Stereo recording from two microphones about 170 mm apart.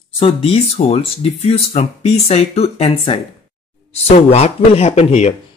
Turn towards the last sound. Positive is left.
turn(degrees=40)  # may be behind; listen again after turning